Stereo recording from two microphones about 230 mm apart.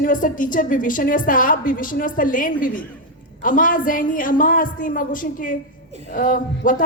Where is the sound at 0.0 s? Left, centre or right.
Left.